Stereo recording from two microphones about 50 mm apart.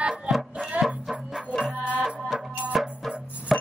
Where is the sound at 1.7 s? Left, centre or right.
Right.